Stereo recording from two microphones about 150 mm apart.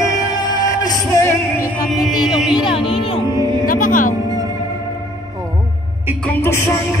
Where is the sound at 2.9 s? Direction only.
40° left (ahead or behind).